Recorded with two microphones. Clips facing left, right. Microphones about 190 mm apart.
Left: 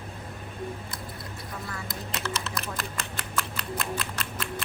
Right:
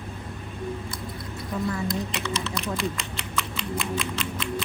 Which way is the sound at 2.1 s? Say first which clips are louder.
Right 3 dB; centre (ahead or behind).